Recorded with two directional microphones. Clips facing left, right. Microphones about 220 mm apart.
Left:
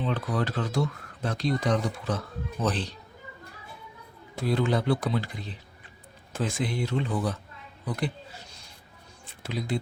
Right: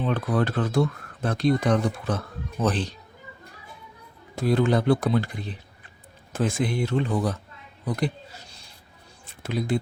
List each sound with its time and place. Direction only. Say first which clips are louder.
0.0 s speech: right 4 dB; 50° right (ahead or behind)
4.4 s speech: right 4 dB; 50° right (ahead or behind)
7.9 s a sound: right 4 dB; 40° right (ahead or behind)
9.4 s speech: right 5 dB; 50° right (ahead or behind)